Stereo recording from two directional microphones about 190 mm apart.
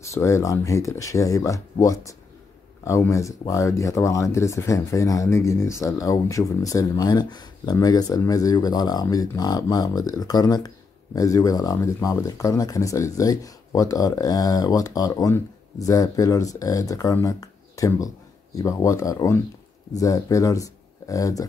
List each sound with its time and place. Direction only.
0.0 s speech: 15° left (ahead or behind)